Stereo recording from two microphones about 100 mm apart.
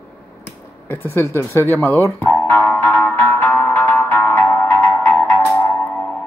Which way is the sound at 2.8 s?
20° left (ahead or behind).